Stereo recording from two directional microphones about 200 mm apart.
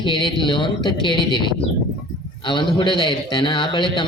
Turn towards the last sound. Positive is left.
turn(degrees=25)  # may be behind; listen again after turning